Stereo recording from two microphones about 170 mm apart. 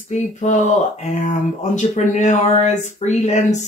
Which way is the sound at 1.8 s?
45° left (ahead or behind).